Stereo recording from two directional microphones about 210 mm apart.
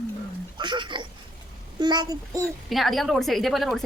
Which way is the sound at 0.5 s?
20° right (ahead or behind).